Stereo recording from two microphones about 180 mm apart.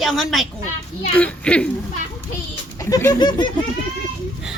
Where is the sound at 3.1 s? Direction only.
25° left (ahead or behind).